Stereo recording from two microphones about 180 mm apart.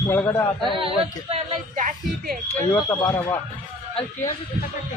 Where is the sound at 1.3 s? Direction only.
45° right (ahead or behind).